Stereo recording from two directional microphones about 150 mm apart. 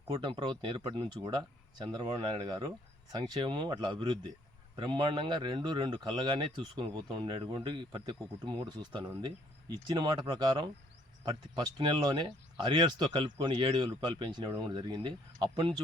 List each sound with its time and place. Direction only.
0.1 s speech: 35° right (ahead or behind)